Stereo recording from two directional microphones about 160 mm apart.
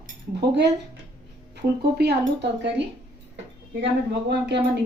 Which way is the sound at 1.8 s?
90° right.